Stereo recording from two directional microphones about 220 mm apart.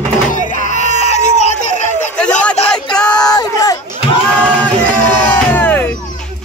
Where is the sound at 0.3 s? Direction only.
35° left (ahead or behind).